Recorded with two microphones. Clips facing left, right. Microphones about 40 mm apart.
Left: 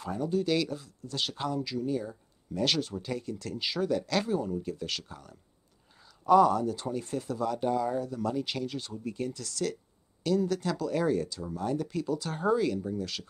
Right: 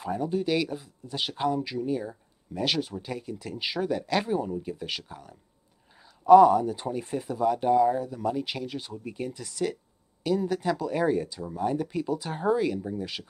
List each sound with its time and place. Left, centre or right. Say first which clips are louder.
0.0 s speech: right 2 dB; centre